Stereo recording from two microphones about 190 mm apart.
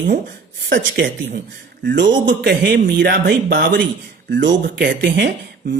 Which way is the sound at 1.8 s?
70° right (ahead or behind).